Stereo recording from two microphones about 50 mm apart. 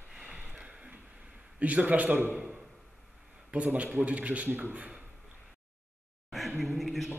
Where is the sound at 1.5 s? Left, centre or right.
Right.